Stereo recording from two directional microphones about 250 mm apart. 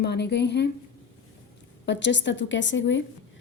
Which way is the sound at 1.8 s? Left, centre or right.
Left.